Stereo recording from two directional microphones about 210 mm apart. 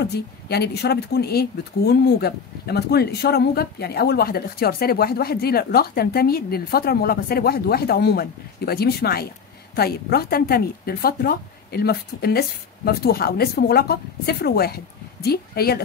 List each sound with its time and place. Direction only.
0.0 s speech: 50° left (ahead or behind)